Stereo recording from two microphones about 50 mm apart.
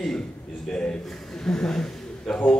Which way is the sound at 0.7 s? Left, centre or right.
Centre.